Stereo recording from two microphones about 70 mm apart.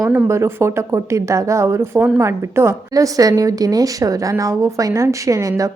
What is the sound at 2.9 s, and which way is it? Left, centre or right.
A woman's voice, right.